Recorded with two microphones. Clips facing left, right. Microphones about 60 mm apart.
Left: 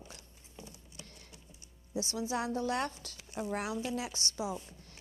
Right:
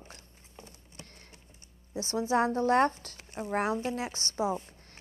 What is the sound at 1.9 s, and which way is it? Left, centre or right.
A woman's voice, right.